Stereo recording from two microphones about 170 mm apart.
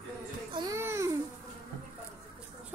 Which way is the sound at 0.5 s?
25° right (ahead or behind).